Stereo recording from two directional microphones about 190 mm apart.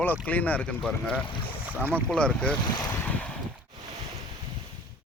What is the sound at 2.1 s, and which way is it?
Speech, 5° left (ahead or behind).